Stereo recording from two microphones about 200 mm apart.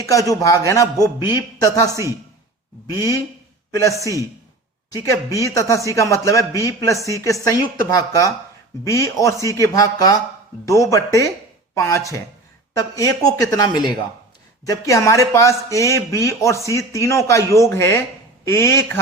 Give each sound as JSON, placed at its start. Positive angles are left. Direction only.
{"t": 0.0, "sound": "a man's voice", "side_deg": 15}
{"t": 1.9, "sound": "a man's voice", "side_deg": -15}
{"t": 3.7, "sound": "a man's voice", "side_deg": 15}
{"t": 4.0, "sound": "a man's voice", "side_deg": -15}
{"t": 4.9, "sound": "a man's voice", "side_deg": 15}